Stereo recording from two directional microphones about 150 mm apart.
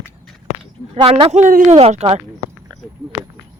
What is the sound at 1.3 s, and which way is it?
Speech, 60° right (ahead or behind).